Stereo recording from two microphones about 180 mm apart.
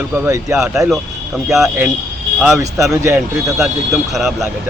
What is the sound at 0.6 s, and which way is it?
Speech, centre (ahead or behind).